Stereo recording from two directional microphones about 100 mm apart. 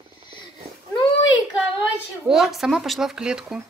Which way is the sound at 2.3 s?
5° right (ahead or behind).